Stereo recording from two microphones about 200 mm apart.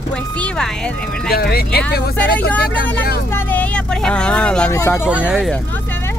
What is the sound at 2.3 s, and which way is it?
Speech, 5° left (ahead or behind).